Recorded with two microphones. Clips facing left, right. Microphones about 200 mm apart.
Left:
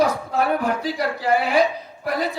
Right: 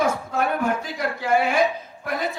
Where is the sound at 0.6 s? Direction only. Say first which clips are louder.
Left 2 dB; 35° left (ahead or behind).